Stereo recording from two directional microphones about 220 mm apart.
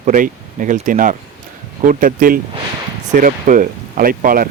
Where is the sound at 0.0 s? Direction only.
35° right (ahead or behind).